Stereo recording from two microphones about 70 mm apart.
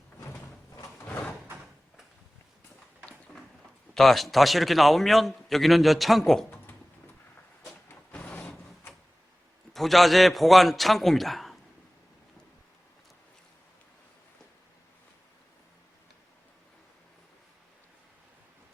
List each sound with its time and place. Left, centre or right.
3.9 s a man's voice: centre
7.7 s a sound: centre
9.7 s a man's voice: centre